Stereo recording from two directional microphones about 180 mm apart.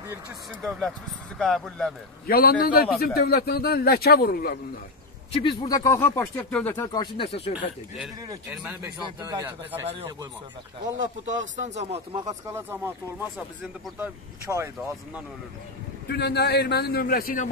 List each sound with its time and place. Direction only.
0.6 s speech: centre (ahead or behind)
2.2 s a man's voice: 55° left (ahead or behind)
5.3 s speech: 25° left (ahead or behind)
5.9 s speech: 15° left (ahead or behind)
6.9 s speech: 25° left (ahead or behind)
8.3 s speech: 20° right (ahead or behind)
11.2 s speech: 40° right (ahead or behind)
12.3 s speech: 15° right (ahead or behind)
16.1 s a man's voice: 65° left (ahead or behind)